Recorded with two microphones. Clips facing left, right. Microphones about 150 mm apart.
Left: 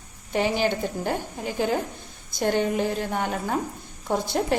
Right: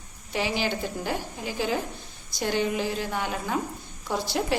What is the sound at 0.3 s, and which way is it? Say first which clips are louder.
A woman's voice: left 4 dB; 50° left (ahead or behind).